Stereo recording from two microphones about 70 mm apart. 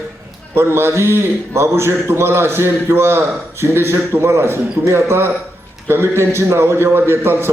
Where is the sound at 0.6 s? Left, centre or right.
Right.